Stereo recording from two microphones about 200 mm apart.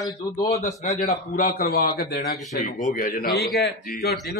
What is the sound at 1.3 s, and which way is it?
Speech, 45° left (ahead or behind).